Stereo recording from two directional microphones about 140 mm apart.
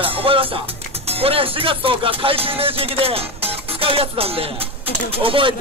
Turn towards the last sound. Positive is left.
turn(degrees=-40)  # may be behind; listen again after turning